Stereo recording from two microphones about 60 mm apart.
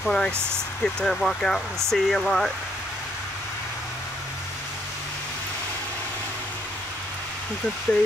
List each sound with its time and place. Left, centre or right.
0.0 s speech: centre
0.3 s speech: right
0.8 s speech: centre
7.9 s speech: left